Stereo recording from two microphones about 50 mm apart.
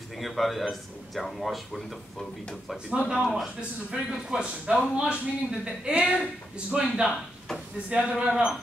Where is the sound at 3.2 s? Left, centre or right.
Centre.